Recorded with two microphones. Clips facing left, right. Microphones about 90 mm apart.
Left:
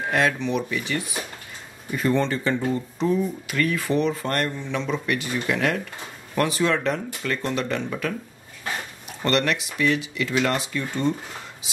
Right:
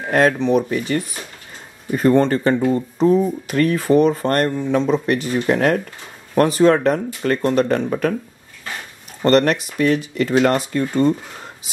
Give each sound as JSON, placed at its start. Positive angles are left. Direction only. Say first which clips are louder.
{"t": 0.1, "sound": "speech", "louder": "right 8 dB", "side_deg": -45}
{"t": 9.2, "sound": "speech", "louder": "right 8 dB", "side_deg": -40}